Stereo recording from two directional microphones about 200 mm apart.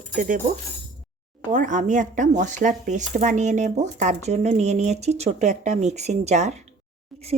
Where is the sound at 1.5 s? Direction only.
40° right (ahead or behind).